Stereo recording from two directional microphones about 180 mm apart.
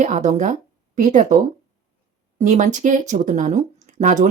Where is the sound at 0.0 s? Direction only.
40° right (ahead or behind).